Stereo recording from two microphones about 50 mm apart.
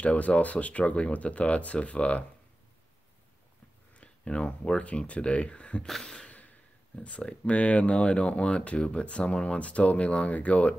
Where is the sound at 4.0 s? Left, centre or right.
Left.